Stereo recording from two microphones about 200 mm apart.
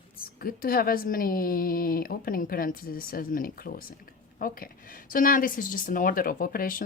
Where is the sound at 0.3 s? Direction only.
45° left (ahead or behind).